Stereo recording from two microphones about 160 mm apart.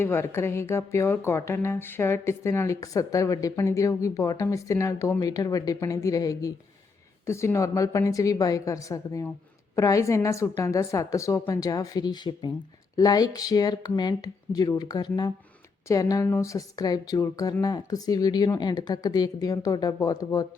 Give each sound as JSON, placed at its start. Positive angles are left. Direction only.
{"t": 0.0, "sound": "a woman's voice", "side_deg": 15}